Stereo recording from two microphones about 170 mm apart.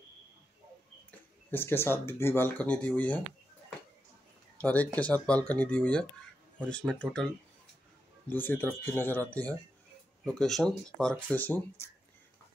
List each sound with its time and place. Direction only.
1.5 s speech: 15° left (ahead or behind)
4.6 s speech: 10° left (ahead or behind)